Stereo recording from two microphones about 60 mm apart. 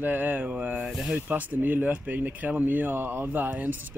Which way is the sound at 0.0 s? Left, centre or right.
Right.